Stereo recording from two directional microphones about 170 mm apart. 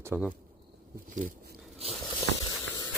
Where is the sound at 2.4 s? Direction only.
20° left (ahead or behind).